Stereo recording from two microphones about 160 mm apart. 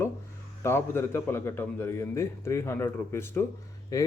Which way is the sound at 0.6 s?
15° left (ahead or behind).